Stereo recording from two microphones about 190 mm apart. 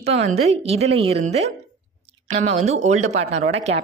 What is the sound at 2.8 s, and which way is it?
Speech, 40° right (ahead or behind).